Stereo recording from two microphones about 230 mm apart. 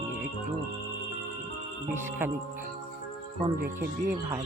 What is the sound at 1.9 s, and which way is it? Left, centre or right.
Speech, centre.